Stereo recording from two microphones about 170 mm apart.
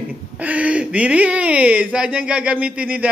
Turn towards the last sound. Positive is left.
turn(degrees=-10)  # may be behind; listen again after turning